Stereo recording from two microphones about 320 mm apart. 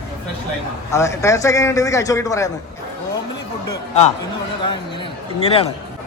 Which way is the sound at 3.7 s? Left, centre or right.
Centre.